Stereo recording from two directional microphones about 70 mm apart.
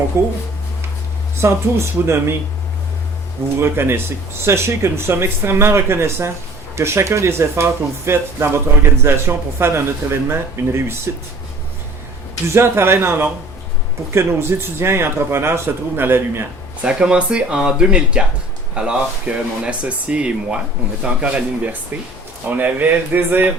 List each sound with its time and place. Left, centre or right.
0.1 s speech: right
1.4 s speech: right
3.6 s speech: right
12.5 s speech: right
16.8 s speech: centre